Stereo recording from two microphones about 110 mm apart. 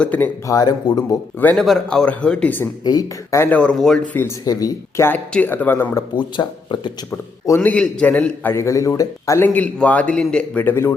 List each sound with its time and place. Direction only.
0.0 s a man's voice: 15° left (ahead or behind)
0.4 s speech: 35° left (ahead or behind)
1.5 s a man's voice: 5° left (ahead or behind)
2.8 s speech: 40° left (ahead or behind)
3.3 s speech: 20° left (ahead or behind)
3.6 s a man's voice: 5° left (ahead or behind)
4.4 s speech: 35° left (ahead or behind)
5.0 s a man's voice: 15° left (ahead or behind)
6.1 s speech: 45° left (ahead or behind)
7.6 s a man's voice: 10° left (ahead or behind)
8.5 s speech: 30° left (ahead or behind)
9.5 s a man's voice: 10° left (ahead or behind)